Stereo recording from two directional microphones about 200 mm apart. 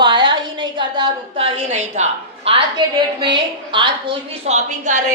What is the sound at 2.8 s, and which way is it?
A woman's voice, 25° right (ahead or behind).